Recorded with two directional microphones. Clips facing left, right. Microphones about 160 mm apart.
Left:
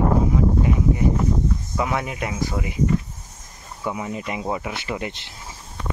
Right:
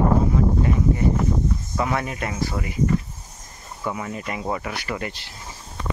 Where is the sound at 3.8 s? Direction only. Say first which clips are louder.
Left 1 dB; 10° left (ahead or behind).